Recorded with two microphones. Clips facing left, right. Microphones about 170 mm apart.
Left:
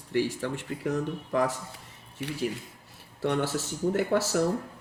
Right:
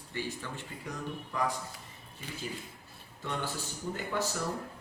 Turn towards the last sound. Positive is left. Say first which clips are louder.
# left 9 dB
turn(degrees=75)  # may be behind; listen again after turning